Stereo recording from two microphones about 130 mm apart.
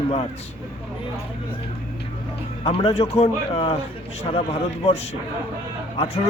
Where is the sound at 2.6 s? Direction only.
50° left (ahead or behind).